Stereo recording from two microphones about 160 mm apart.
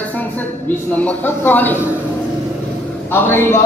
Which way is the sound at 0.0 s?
10° left (ahead or behind).